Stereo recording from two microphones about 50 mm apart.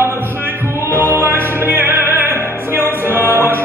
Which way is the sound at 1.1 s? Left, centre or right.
Right.